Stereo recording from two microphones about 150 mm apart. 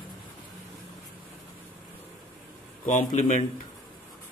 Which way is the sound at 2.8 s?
55° left (ahead or behind).